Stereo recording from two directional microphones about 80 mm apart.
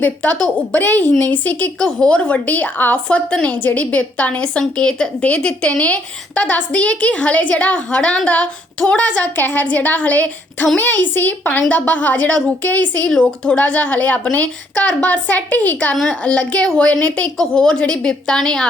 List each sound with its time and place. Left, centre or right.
0.0 s speech: centre
0.3 s a woman's voice: centre
0.8 s a woman's voice: left